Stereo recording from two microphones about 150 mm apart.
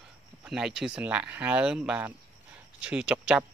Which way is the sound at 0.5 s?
5° right (ahead or behind).